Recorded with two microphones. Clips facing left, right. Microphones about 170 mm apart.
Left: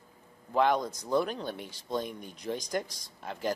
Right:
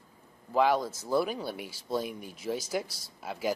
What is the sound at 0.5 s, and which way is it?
Speech, 5° right (ahead or behind).